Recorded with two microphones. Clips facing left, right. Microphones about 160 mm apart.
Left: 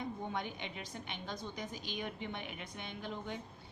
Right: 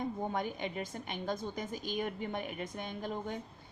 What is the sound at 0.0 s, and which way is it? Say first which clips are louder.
Speech: right 5 dB; 45° right (ahead or behind).